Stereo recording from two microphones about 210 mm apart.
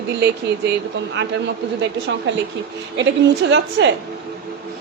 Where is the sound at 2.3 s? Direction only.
60° right (ahead or behind).